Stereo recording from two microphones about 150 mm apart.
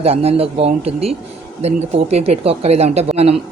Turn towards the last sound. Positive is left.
turn(degrees=-45)  # may be behind; listen again after turning